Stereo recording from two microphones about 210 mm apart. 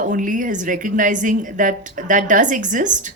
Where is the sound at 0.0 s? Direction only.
40° right (ahead or behind).